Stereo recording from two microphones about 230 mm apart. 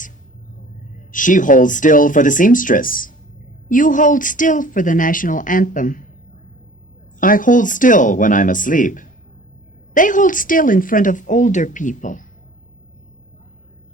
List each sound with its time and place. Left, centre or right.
1.1 s speech: left
7.2 s speech: left